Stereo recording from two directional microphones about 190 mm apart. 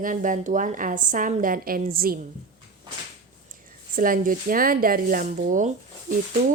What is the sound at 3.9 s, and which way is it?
A woman's voice, 45° right (ahead or behind).